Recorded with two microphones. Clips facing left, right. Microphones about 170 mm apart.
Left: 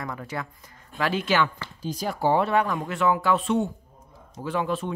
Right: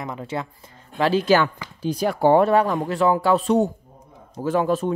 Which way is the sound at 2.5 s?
35° right (ahead or behind).